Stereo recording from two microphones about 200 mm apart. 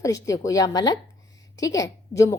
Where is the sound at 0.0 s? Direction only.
15° left (ahead or behind).